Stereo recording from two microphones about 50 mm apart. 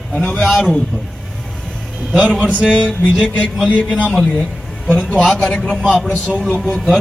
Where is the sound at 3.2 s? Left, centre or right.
Left.